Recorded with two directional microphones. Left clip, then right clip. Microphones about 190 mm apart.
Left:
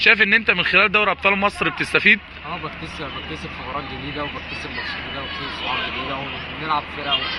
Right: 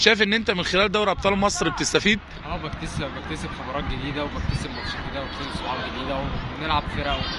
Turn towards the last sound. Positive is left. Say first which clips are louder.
# left 2 dB
turn(degrees=-20)  # may be behind; listen again after turning